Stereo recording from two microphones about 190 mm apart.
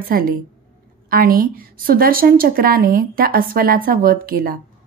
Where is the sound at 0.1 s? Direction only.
50° right (ahead or behind).